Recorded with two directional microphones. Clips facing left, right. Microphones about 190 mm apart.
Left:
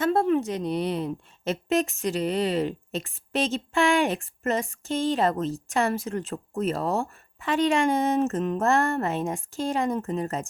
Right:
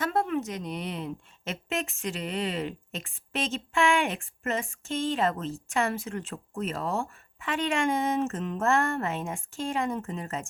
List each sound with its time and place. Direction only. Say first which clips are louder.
0.0 s a woman's voice: left 6 dB; 30° left (ahead or behind)